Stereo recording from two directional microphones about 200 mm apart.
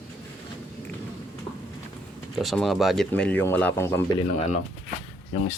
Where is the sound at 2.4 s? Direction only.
Centre (ahead or behind).